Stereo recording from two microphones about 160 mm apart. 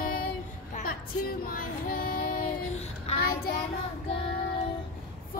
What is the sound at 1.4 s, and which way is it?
Child singing, 65° left (ahead or behind).